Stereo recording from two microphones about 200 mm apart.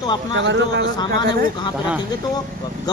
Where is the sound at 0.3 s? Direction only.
70° right (ahead or behind).